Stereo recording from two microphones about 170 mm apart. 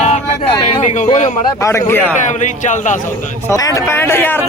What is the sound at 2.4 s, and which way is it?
Speech, 45° left (ahead or behind).